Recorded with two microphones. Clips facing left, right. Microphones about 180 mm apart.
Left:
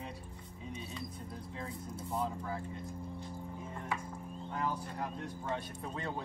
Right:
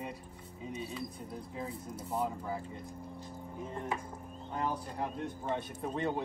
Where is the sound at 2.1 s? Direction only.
15° right (ahead or behind).